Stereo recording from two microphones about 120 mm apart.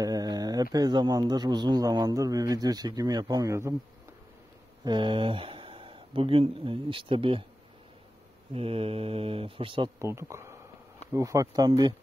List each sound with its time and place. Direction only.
0.0 s speech: 30° right (ahead or behind)
4.8 s speech: 40° right (ahead or behind)
8.5 s speech: 50° right (ahead or behind)
9.9 s speech: 25° right (ahead or behind)